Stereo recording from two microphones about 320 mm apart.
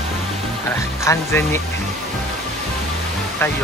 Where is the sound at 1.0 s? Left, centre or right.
Centre.